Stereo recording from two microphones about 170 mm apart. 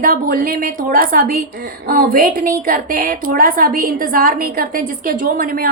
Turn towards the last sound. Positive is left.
turn(degrees=-55)  # may be behind; listen again after turning